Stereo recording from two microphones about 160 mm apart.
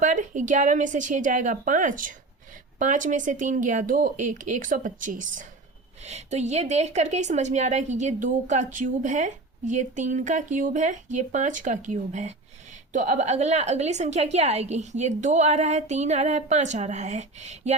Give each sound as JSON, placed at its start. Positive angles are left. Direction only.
{"t": 0.0, "sound": "a woman's voice", "side_deg": -50}